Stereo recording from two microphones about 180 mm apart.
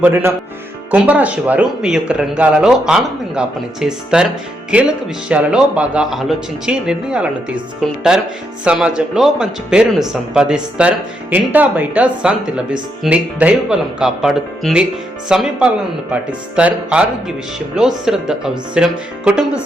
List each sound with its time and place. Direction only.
0.0 s speech: 15° right (ahead or behind)